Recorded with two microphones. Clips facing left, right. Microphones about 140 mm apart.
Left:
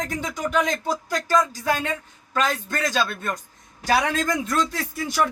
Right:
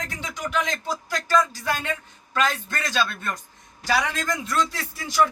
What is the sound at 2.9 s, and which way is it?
A man's voice, 40° left (ahead or behind).